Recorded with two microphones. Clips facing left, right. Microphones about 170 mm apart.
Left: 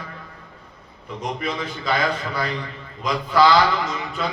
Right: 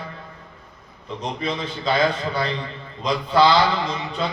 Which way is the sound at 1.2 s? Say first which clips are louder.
Even; 30° right (ahead or behind).